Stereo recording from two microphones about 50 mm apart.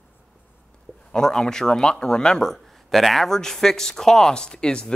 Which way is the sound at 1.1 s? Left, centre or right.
Centre.